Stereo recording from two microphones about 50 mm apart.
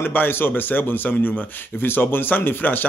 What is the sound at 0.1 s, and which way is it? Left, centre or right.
A man's voice, left.